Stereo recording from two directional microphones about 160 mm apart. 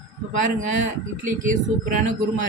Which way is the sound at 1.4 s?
55° right (ahead or behind).